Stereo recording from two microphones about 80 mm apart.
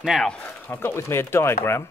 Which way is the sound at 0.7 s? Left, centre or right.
Left.